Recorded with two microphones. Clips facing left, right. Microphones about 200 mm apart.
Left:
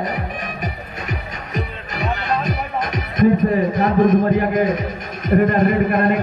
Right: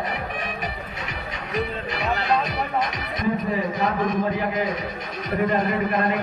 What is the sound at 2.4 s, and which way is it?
Music, 50° left (ahead or behind).